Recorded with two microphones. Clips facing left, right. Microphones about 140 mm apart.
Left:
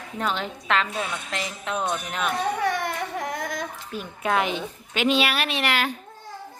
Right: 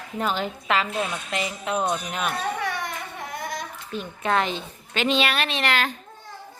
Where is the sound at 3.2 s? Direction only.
90° left.